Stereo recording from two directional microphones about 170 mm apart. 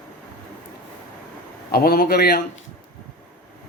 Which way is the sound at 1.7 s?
65° left (ahead or behind).